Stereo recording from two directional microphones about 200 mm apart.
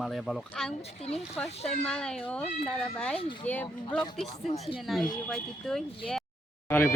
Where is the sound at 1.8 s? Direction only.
5° left (ahead or behind).